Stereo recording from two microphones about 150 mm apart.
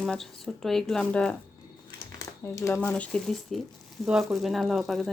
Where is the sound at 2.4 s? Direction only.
20° left (ahead or behind).